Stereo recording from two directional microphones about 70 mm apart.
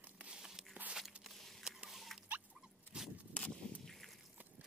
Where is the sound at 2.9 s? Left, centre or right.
Centre.